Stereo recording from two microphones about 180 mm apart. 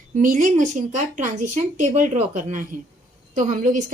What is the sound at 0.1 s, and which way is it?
A woman's voice, 45° right (ahead or behind).